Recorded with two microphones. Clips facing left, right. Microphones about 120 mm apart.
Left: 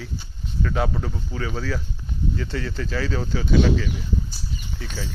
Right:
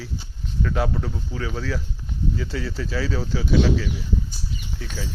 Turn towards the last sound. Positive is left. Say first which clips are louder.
# even
turn(degrees=0)  # may be behind; listen again after turning